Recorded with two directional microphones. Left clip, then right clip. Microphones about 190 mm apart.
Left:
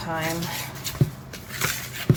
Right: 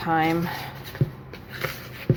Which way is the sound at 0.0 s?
45° right (ahead or behind).